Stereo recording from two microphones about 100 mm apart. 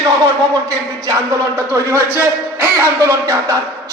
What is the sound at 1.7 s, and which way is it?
A man's voice, 25° right (ahead or behind).